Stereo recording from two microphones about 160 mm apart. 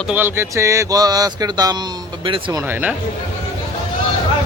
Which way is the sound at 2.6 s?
10° right (ahead or behind).